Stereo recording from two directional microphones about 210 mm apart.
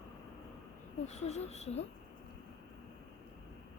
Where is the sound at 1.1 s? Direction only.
30° left (ahead or behind).